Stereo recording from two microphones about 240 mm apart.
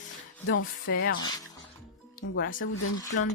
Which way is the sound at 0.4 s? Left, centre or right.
Left.